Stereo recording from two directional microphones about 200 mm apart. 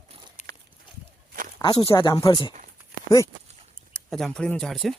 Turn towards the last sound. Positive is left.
turn(degrees=0)  # may be behind; listen again after turning